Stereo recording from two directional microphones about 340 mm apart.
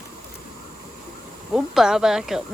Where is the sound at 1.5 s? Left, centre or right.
Centre.